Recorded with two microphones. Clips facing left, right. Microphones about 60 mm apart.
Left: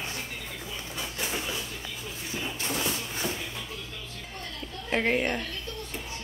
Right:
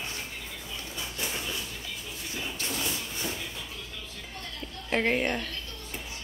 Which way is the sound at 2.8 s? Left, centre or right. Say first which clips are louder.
Left 3 dB; left.